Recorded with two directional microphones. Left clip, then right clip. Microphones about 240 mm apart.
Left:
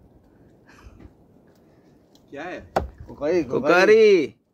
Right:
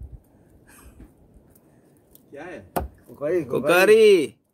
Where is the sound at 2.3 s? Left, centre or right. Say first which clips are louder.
Left 4 dB; centre.